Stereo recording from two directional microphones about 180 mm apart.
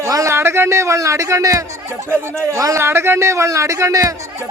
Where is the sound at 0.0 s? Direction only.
15° right (ahead or behind).